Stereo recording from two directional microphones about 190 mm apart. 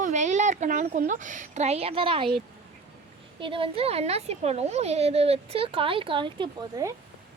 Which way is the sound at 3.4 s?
25° right (ahead or behind).